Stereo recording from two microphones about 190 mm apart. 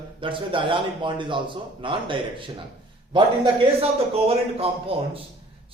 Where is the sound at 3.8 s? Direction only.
30° right (ahead or behind).